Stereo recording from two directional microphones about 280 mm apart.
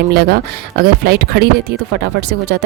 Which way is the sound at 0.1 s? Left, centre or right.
Right.